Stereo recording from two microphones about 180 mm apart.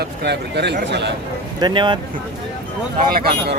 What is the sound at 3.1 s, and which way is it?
Speech, 55° right (ahead or behind).